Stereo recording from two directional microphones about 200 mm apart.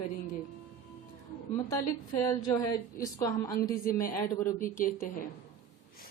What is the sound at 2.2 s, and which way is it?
A woman's voice, 20° left (ahead or behind).